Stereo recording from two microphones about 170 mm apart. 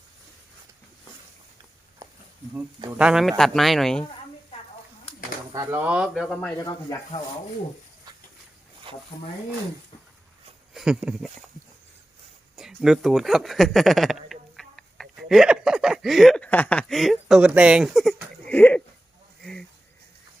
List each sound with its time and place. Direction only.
3.0 s speech: 5° right (ahead or behind)
5.5 s speech: 10° right (ahead or behind)
8.9 s a sound: 30° right (ahead or behind)
10.8 s speech: 5° right (ahead or behind)
12.5 s speech: 5° right (ahead or behind)
19.4 s a sound: 5° left (ahead or behind)